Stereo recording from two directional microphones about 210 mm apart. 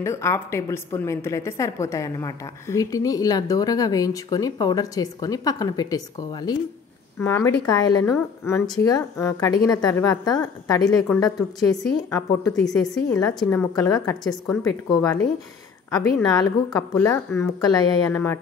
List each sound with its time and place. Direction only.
0.0 s a woman's voice: 15° left (ahead or behind)
15.9 s a woman's voice: 15° left (ahead or behind)